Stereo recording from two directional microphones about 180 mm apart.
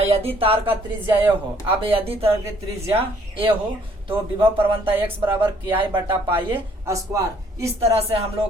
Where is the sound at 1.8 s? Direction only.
30° right (ahead or behind).